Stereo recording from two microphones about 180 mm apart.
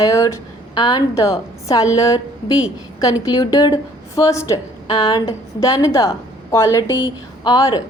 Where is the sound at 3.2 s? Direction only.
20° left (ahead or behind).